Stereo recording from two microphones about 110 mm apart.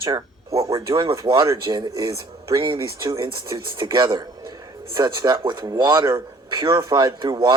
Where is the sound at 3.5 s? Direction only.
45° right (ahead or behind).